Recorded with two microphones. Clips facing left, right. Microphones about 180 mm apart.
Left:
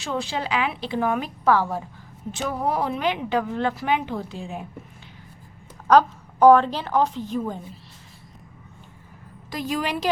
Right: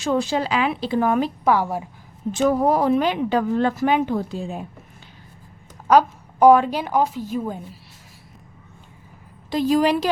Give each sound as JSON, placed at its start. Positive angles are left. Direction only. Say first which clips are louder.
{"t": 0.0, "sound": "speech", "louder": "right 6 dB", "side_deg": -45}
{"t": 1.5, "sound": "a woman's voice", "louder": "left 2 dB", "side_deg": -15}
{"t": 2.3, "sound": "speech", "louder": "right 7 dB", "side_deg": -40}
{"t": 5.9, "sound": "a woman's voice", "louder": "right 1 dB", "side_deg": -10}
{"t": 9.5, "sound": "speech", "louder": "right 9 dB", "side_deg": -30}